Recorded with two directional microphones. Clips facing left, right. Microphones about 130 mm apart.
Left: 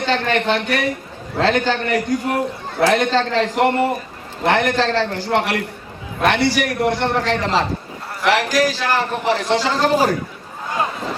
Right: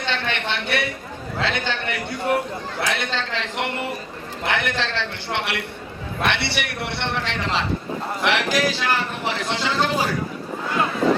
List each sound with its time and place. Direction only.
0.0 s a man's voice: 40° left (ahead or behind)